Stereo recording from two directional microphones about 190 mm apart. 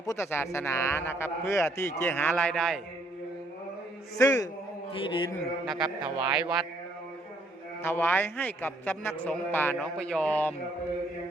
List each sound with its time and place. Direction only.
0.0 s speech: 15° left (ahead or behind)
4.2 s speech: 15° left (ahead or behind)
4.9 s mantra: 25° left (ahead or behind)
5.6 s a sound: centre (ahead or behind)
7.8 s speech: 10° left (ahead or behind)
9.7 s a sound: 5° left (ahead or behind)